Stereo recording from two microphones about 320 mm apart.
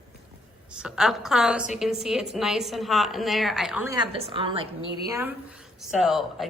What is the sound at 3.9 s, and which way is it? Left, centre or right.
A woman's voice, centre.